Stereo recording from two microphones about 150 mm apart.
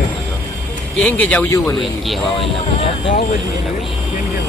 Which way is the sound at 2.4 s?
40° left (ahead or behind).